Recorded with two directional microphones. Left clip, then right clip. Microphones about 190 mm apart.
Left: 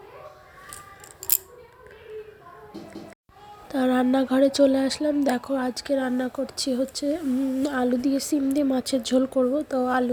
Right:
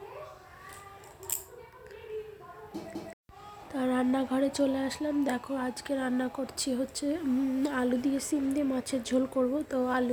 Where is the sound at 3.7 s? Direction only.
25° left (ahead or behind).